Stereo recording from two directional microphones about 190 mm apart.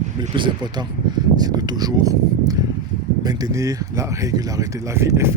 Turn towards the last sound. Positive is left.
turn(degrees=-15)  # may be behind; listen again after turning